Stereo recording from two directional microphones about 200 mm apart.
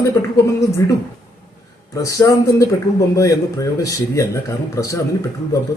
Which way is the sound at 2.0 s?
15° left (ahead or behind).